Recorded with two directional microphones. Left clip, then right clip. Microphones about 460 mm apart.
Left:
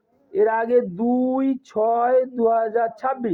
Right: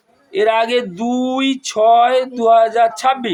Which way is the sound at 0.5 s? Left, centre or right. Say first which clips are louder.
Right 3 dB; left.